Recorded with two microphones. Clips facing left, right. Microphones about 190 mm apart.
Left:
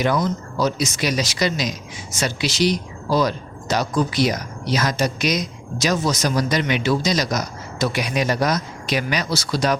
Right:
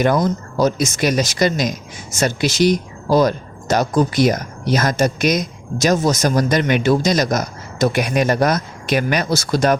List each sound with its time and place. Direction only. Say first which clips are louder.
0.0 s speech: right 4 dB; 50° right (ahead or behind)